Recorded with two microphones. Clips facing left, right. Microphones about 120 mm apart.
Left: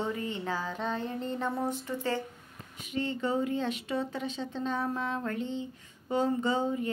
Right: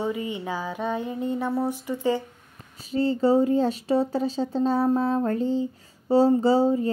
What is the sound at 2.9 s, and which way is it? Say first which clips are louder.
Speech: right 10 dB; 35° right (ahead or behind).